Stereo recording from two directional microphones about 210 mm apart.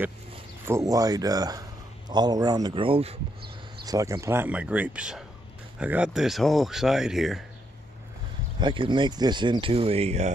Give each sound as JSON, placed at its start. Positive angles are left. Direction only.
{"t": 0.7, "sound": "speech", "side_deg": -15}
{"t": 3.8, "sound": "speech", "side_deg": -15}
{"t": 8.5, "sound": "speech", "side_deg": -25}